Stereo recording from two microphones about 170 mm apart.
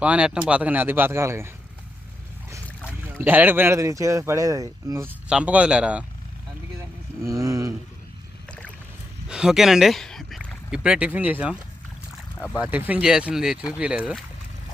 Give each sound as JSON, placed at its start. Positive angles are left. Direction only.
{"t": 0.0, "sound": "speech", "side_deg": -5}
{"t": 2.8, "sound": "speech", "side_deg": -10}
{"t": 5.3, "sound": "speech", "side_deg": -5}
{"t": 7.2, "sound": "a sound", "side_deg": -20}
{"t": 8.4, "sound": "rowboat", "side_deg": 5}
{"t": 9.3, "sound": "speech", "side_deg": -5}
{"t": 12.5, "sound": "speech", "side_deg": -10}